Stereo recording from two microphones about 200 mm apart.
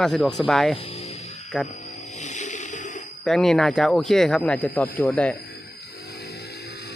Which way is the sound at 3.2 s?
Centre (ahead or behind).